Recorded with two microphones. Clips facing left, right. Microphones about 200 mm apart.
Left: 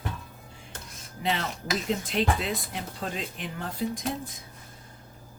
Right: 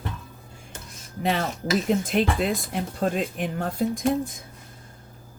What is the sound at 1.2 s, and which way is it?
Speech, 50° right (ahead or behind).